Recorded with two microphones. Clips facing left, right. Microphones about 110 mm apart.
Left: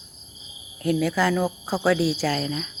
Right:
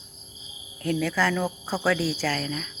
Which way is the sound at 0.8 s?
15° left (ahead or behind).